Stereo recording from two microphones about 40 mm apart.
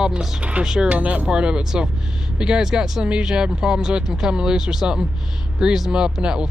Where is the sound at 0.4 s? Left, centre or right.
Right.